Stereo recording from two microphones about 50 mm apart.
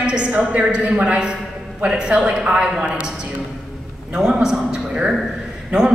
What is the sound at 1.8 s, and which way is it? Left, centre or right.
A woman's voice, centre.